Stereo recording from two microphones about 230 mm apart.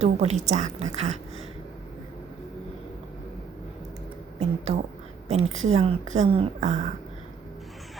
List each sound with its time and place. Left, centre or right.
0.0 s a woman's voice: right
4.4 s a sound: right
5.3 s a woman's voice: right